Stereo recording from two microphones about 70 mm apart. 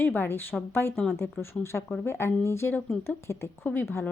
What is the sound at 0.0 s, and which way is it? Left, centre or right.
Speech, left.